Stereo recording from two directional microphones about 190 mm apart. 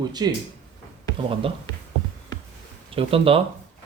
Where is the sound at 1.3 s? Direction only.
30° right (ahead or behind).